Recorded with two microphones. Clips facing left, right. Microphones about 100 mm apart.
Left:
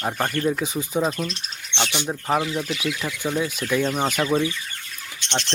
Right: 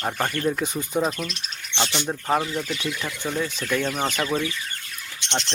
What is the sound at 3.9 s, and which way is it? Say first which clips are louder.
Speech: left 3 dB; 20° left (ahead or behind).